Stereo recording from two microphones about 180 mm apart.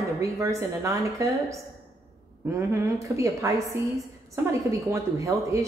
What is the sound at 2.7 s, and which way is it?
Speech, 15° right (ahead or behind).